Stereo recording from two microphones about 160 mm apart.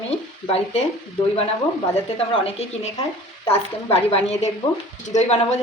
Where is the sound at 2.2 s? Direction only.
35° left (ahead or behind).